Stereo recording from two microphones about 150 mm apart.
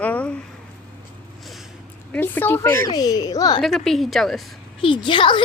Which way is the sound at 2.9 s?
25° left (ahead or behind).